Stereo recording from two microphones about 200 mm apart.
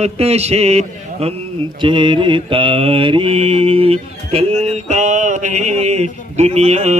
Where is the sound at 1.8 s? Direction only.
25° right (ahead or behind).